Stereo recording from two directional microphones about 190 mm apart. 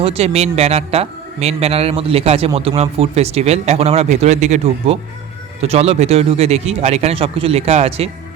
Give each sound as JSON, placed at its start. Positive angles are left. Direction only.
{"t": 0.0, "sound": "a man's voice", "side_deg": -35}